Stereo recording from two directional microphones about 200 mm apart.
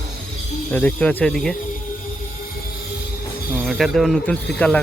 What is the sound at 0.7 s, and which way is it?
Speech, 5° left (ahead or behind).